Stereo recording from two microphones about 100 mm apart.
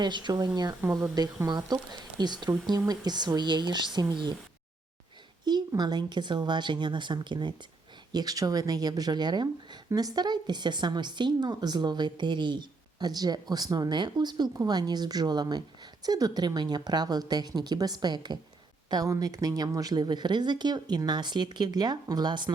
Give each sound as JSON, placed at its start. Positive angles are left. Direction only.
{"t": 0.0, "sound": "a woman's voice", "side_deg": -50}
{"t": 5.5, "sound": "a woman's voice", "side_deg": -45}
{"t": 8.1, "sound": "a woman's voice", "side_deg": -40}